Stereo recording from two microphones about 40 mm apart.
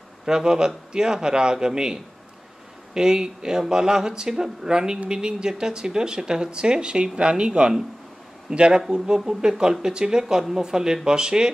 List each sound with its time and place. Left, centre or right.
0.2 s speech: centre